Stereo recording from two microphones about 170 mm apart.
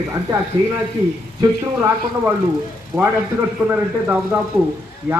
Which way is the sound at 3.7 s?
10° right (ahead or behind).